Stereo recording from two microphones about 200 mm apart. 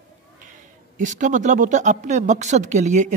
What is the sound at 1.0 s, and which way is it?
Speech, 40° right (ahead or behind).